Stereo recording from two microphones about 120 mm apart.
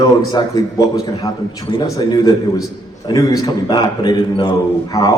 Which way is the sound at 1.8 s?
35° left (ahead or behind).